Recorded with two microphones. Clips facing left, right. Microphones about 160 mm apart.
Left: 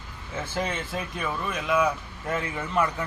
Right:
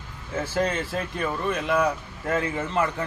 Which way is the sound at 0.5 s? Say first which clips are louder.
Right 4 dB; centre (ahead or behind).